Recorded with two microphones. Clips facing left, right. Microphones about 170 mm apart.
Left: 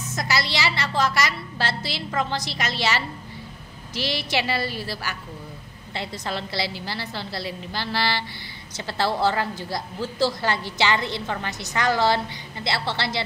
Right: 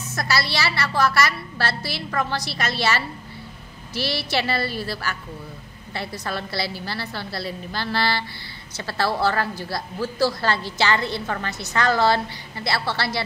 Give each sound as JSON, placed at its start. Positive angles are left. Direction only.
{"t": 0.1, "sound": "a woman's voice", "side_deg": 20}